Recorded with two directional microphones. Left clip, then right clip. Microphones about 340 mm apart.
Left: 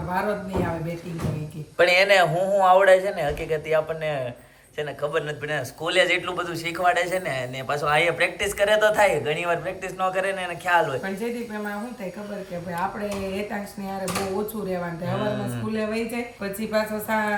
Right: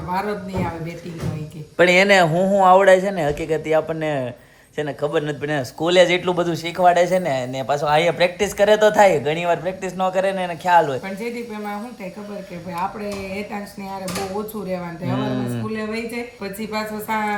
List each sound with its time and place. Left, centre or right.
1.8 s a man's voice: right
15.2 s speech: centre
15.7 s speech: centre